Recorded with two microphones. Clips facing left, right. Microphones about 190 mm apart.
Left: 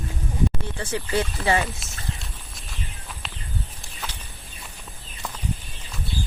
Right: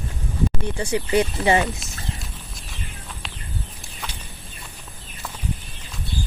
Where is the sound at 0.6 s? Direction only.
15° right (ahead or behind).